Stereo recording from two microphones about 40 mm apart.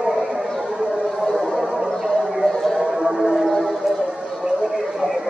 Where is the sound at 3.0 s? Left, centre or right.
Centre.